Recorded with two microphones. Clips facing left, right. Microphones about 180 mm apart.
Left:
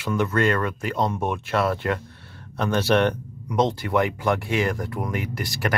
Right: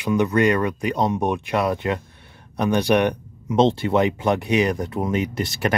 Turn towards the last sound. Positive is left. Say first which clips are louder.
# right 3 dB
turn(degrees=-20)  # may be behind; listen again after turning